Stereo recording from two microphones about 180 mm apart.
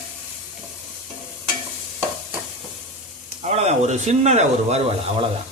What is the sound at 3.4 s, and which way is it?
Speech, 35° right (ahead or behind).